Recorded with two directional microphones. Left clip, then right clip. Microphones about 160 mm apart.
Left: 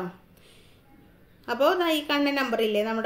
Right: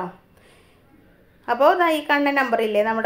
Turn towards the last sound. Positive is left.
turn(degrees=15)  # may be behind; listen again after turning